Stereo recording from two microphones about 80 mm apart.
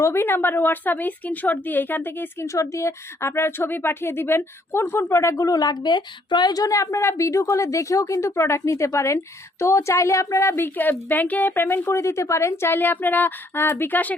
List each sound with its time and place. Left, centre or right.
0.0 s a woman's voice: left
2.5 s speech: left
5.7 s speech: left